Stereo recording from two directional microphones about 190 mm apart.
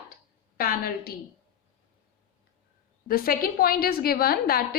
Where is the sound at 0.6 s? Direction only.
50° left (ahead or behind).